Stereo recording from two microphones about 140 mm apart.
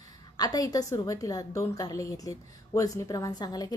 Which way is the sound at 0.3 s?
25° left (ahead or behind).